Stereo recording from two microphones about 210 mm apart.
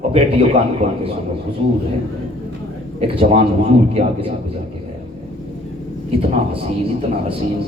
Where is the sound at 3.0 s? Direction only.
30° right (ahead or behind).